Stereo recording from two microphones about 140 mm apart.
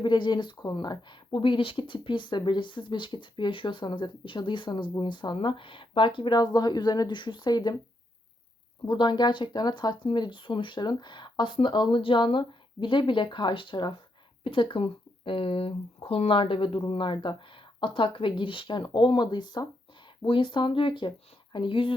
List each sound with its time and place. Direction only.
0.0 s speech: 35° left (ahead or behind)
8.9 s speech: 35° left (ahead or behind)